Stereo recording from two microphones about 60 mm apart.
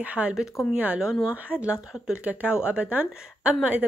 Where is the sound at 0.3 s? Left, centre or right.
Centre.